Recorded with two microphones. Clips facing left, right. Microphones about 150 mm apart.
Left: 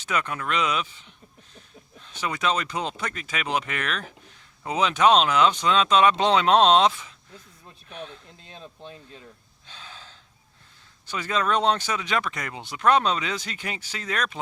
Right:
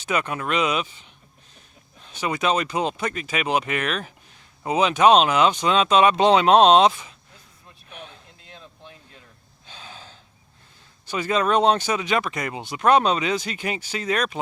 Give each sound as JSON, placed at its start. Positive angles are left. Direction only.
{"t": 0.0, "sound": "speech", "side_deg": -15}
{"t": 2.0, "sound": "speech", "side_deg": -15}
{"t": 8.5, "sound": "a sound", "side_deg": 30}
{"t": 9.6, "sound": "gasp", "side_deg": -15}
{"t": 11.0, "sound": "speech", "side_deg": -15}